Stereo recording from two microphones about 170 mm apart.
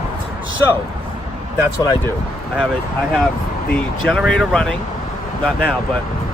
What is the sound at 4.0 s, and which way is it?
Speech, centre (ahead or behind).